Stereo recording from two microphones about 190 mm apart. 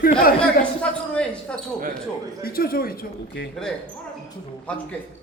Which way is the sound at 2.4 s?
50° left (ahead or behind).